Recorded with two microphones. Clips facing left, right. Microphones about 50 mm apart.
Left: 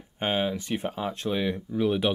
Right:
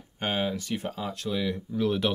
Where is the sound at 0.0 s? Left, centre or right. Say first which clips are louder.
Left 2 dB; left.